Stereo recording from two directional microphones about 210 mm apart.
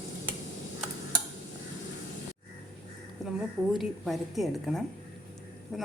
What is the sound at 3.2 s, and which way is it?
A woman's voice, centre (ahead or behind).